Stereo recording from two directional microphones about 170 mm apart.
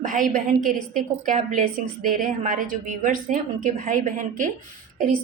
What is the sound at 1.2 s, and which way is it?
A woman's voice, 50° right (ahead or behind).